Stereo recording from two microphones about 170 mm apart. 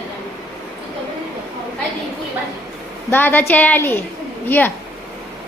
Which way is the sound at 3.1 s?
10° left (ahead or behind).